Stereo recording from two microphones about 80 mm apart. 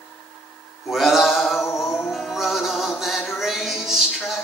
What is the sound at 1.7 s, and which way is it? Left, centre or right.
Music, centre.